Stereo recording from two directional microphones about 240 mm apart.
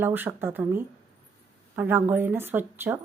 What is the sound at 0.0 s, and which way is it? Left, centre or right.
A woman's voice, centre.